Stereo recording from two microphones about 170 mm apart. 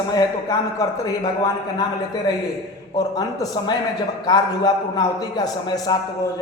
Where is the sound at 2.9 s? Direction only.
20° left (ahead or behind).